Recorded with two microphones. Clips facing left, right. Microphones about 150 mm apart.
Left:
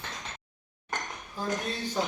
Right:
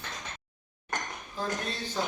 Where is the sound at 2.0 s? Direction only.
15° left (ahead or behind).